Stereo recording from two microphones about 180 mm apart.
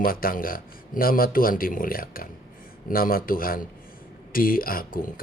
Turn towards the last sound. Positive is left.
turn(degrees=50)  # may be behind; listen again after turning